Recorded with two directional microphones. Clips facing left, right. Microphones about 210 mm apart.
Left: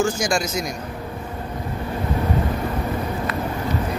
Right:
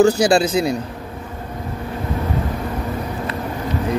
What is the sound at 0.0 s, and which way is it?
Speech, 35° right (ahead or behind).